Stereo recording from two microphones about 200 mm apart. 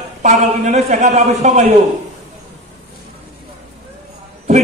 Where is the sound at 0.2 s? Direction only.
35° right (ahead or behind).